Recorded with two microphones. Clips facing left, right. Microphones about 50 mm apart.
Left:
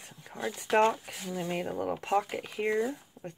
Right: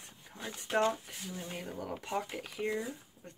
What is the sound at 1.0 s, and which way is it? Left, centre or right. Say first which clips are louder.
Speech: left 7 dB; left.